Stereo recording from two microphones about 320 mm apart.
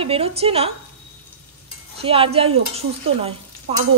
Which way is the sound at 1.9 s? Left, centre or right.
Centre.